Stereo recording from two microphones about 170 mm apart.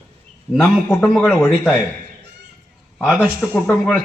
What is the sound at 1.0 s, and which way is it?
Speech, centre (ahead or behind).